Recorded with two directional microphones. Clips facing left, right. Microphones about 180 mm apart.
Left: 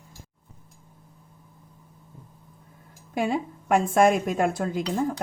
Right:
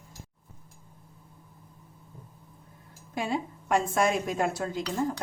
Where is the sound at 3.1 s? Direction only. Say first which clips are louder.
Left 5 dB; 55° left (ahead or behind).